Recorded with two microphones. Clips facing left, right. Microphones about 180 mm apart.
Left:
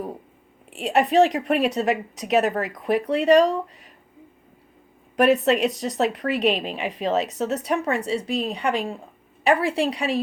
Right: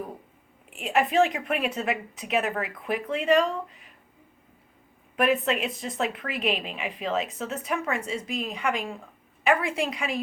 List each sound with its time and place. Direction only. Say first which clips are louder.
0.7 s a woman's voice: left 5 dB; 35° left (ahead or behind)
5.1 s a woman's voice: left 6 dB; 40° left (ahead or behind)